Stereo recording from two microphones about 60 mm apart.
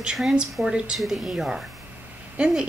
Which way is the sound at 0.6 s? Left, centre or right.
Centre.